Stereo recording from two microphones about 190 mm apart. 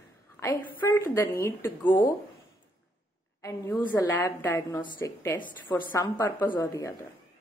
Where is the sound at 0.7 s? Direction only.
15° left (ahead or behind).